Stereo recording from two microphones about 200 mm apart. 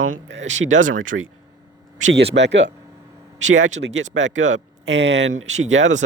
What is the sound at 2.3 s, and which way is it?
Speech, 60° right (ahead or behind).